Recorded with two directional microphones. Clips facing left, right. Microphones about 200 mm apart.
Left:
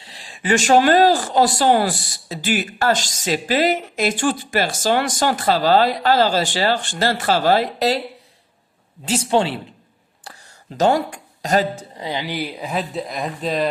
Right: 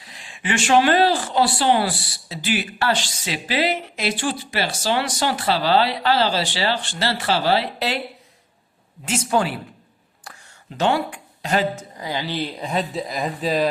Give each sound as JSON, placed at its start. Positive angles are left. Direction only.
{"t": 0.0, "sound": "speech", "side_deg": 35}
{"t": 9.0, "sound": "speech", "side_deg": 30}